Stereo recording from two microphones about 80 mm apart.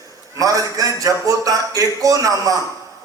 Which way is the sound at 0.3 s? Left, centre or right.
Right.